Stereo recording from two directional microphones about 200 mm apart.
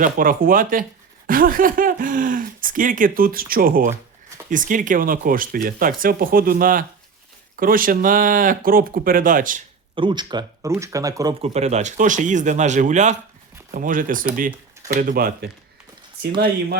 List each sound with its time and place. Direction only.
0.0 s speech: 45° right (ahead or behind)
9.9 s speech: 25° right (ahead or behind)
11.4 s speech: 35° right (ahead or behind)